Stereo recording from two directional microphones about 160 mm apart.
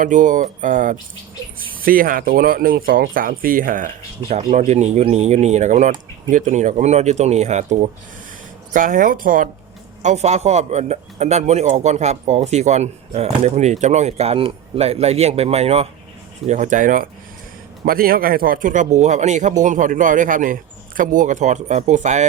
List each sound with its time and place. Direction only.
0.0 s speech: 50° right (ahead or behind)
10.0 s speech: 45° right (ahead or behind)
16.5 s speech: 50° right (ahead or behind)